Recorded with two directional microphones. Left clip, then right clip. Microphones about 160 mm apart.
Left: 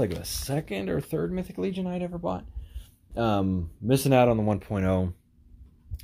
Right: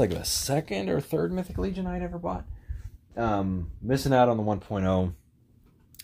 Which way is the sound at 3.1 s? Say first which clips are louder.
Left 1 dB; 70° left (ahead or behind).